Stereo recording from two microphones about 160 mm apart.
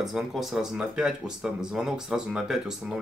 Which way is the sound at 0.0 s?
Centre (ahead or behind).